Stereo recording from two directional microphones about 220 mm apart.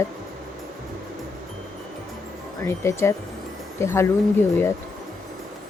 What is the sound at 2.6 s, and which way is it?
Speech, 10° left (ahead or behind).